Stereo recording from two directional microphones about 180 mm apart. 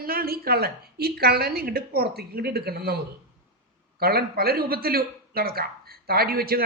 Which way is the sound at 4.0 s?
60° right (ahead or behind).